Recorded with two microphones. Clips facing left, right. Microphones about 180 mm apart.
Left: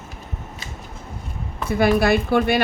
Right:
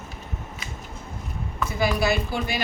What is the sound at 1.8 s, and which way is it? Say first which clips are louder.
Speech: left 6 dB; 55° left (ahead or behind).